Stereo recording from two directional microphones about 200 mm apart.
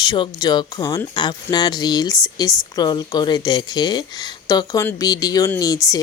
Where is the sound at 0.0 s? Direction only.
20° left (ahead or behind).